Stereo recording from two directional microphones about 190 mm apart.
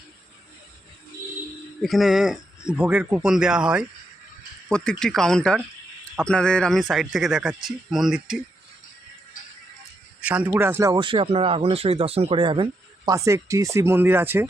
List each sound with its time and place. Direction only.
1.8 s speech: centre (ahead or behind)
10.2 s a sound: 5° right (ahead or behind)
10.5 s speech: 15° right (ahead or behind)
13.1 s speech: 15° right (ahead or behind)